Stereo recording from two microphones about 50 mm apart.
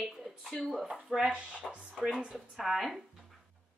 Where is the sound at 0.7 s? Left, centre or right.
Centre.